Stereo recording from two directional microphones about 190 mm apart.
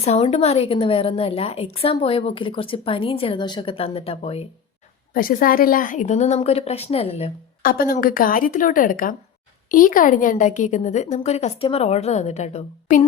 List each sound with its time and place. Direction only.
0.0 s a woman's voice: 35° left (ahead or behind)
5.1 s a woman's voice: 50° left (ahead or behind); by 7.3 s 30° left (ahead or behind)
7.6 s a woman's voice: 50° left (ahead or behind)